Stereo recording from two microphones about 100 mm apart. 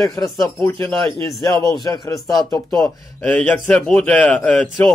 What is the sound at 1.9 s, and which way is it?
Speech, 35° left (ahead or behind).